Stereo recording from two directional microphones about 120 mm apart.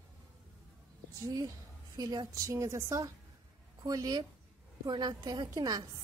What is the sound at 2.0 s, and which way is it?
A woman's voice, 35° right (ahead or behind).